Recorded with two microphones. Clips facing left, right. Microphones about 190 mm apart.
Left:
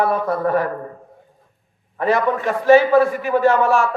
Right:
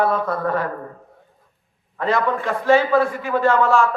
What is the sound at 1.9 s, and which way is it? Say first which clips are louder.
A man's voice: left 2 dB; 15° left (ahead or behind).